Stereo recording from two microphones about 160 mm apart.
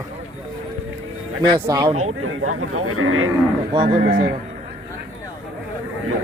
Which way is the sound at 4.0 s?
65° right (ahead or behind).